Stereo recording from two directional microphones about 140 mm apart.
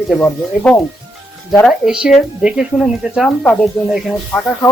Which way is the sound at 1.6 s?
5° right (ahead or behind).